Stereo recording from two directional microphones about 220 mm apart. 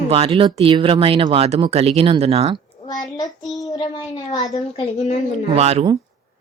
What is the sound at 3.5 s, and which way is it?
A child's voice, 15° left (ahead or behind).